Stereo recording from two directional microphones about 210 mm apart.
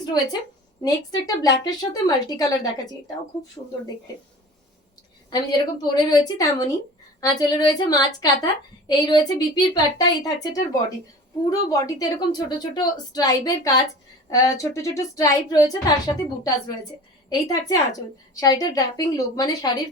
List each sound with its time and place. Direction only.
0.0 s a woman's voice: 20° left (ahead or behind)
5.3 s a woman's voice: 20° left (ahead or behind)
17.2 s a woman's voice: 15° left (ahead or behind)